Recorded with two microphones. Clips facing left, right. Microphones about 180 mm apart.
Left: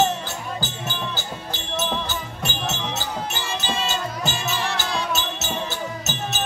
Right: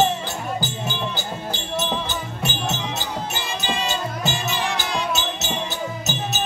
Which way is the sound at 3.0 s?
15° right (ahead or behind).